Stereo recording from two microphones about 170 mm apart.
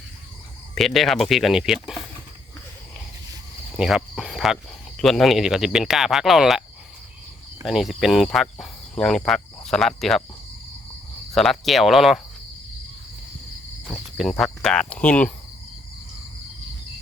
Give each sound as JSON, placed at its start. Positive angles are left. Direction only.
{"t": 0.8, "sound": "speech", "side_deg": 0}
{"t": 3.8, "sound": "speech", "side_deg": -5}
{"t": 7.6, "sound": "speech", "side_deg": 0}
{"t": 11.3, "sound": "speech", "side_deg": 0}
{"t": 13.8, "sound": "cricket", "side_deg": 0}